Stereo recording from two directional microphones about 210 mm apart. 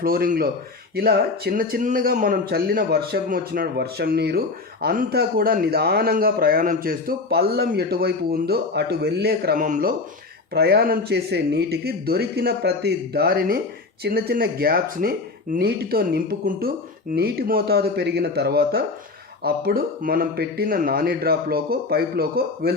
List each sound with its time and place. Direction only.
0.0 s speech: 45° right (ahead or behind)
10.5 s speech: 50° right (ahead or behind)